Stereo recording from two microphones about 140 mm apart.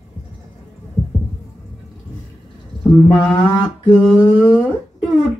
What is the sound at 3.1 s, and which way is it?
Mantra, 30° left (ahead or behind).